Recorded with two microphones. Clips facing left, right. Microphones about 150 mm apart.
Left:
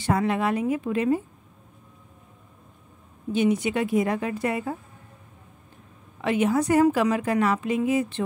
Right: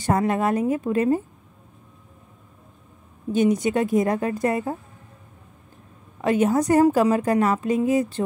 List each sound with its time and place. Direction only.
0.0 s a woman's voice: 45° right (ahead or behind)
3.3 s a woman's voice: 40° right (ahead or behind)
6.2 s a woman's voice: 40° right (ahead or behind)